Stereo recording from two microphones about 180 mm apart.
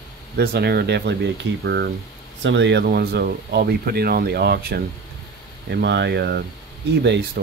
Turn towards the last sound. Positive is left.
turn(degrees=-70)  # may be behind; listen again after turning